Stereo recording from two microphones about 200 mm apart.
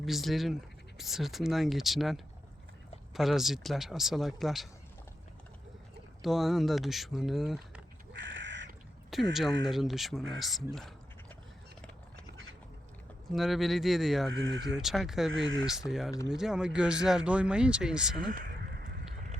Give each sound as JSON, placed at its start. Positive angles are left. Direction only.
{"t": 0.0, "sound": "speech", "side_deg": 0}
{"t": 6.2, "sound": "speech", "side_deg": 0}
{"t": 8.2, "sound": "crow", "side_deg": -65}
{"t": 9.3, "sound": "speech", "side_deg": 0}
{"t": 13.3, "sound": "speech", "side_deg": 0}
{"t": 14.3, "sound": "speech", "side_deg": -65}
{"t": 14.7, "sound": "speech", "side_deg": 0}
{"t": 18.3, "sound": "a sound", "side_deg": -50}